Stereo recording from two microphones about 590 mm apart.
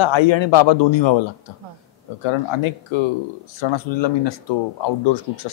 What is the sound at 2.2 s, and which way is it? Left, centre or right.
Speech, left.